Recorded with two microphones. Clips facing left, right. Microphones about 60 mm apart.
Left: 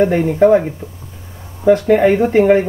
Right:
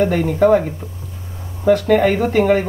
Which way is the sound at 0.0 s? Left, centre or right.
Left.